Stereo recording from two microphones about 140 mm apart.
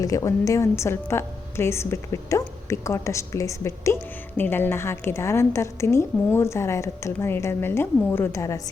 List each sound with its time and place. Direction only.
0.0 s a woman's voice: 25° left (ahead or behind)